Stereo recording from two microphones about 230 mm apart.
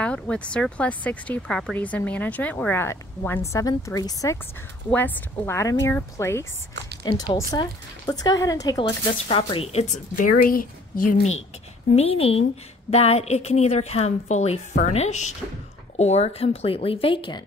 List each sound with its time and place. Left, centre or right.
0.0 s a woman's voice: centre; by 11.3 s left
11.9 s a woman's voice: left